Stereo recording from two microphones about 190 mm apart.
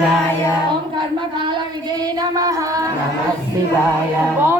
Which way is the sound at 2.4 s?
20° right (ahead or behind).